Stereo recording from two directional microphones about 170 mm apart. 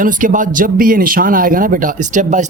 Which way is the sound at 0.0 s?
50° right (ahead or behind).